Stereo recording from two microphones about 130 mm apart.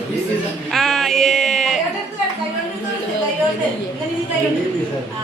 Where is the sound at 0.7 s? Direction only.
Centre (ahead or behind).